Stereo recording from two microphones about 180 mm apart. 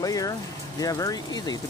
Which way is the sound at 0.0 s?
20° left (ahead or behind).